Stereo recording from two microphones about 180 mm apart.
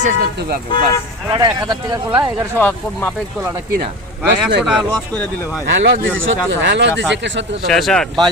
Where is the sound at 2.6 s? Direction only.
10° left (ahead or behind).